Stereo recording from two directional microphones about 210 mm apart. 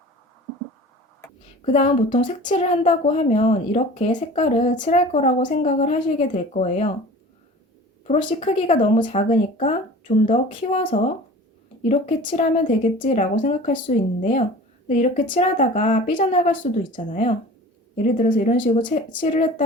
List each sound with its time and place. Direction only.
1.6 s speech: 35° left (ahead or behind)
8.0 s speech: 35° left (ahead or behind)
10.2 s speech: 25° left (ahead or behind)
11.9 s speech: 30° left (ahead or behind)